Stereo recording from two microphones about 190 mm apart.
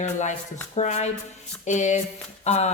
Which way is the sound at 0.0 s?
40° left (ahead or behind).